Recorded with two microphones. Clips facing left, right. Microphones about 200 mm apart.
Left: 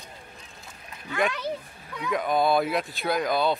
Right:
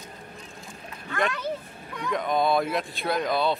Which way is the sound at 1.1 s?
5° left (ahead or behind).